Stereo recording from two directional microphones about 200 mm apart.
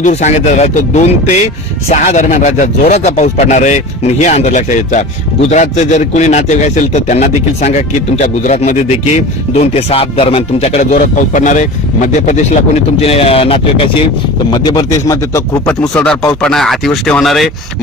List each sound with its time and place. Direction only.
0.0 s speech: 35° left (ahead or behind); by 15.7 s 15° left (ahead or behind)
15.8 s speech: 5° left (ahead or behind)